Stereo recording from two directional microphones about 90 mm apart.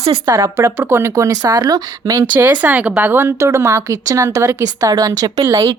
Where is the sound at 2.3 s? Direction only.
20° right (ahead or behind); by 5.7 s 40° right (ahead or behind).